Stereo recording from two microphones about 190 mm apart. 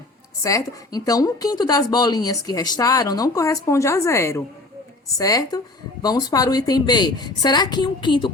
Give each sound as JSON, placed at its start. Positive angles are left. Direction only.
{"t": 0.4, "sound": "speech", "side_deg": 20}